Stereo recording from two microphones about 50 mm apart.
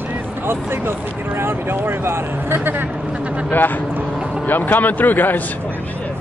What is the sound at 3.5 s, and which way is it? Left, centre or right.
Speech, left.